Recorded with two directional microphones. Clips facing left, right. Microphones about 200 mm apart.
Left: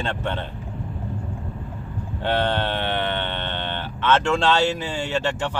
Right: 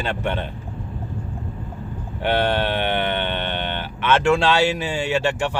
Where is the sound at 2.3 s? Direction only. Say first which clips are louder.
Right 3 dB; 15° right (ahead or behind).